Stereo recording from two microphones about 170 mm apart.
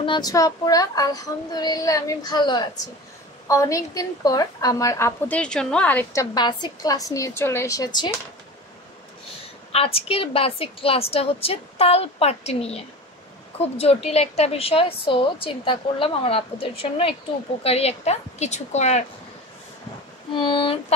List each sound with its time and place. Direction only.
0.0 s child singing: 25° left (ahead or behind)
3.4 s a woman's voice: 20° left (ahead or behind)
6.3 s child singing: 25° left (ahead or behind)
9.7 s a woman's voice: 35° left (ahead or behind)
20.3 s child singing: 30° left (ahead or behind)